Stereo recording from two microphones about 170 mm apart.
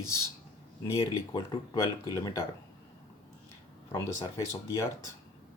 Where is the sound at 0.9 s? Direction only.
20° left (ahead or behind).